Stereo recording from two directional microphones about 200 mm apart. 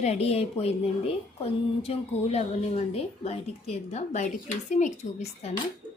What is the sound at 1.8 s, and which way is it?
A woman's voice, 30° left (ahead or behind).